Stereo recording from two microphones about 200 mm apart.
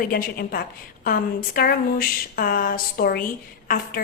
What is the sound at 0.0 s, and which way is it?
Speech, 45° left (ahead or behind).